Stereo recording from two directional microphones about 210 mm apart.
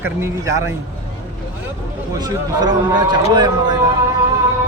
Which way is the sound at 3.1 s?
20° right (ahead or behind).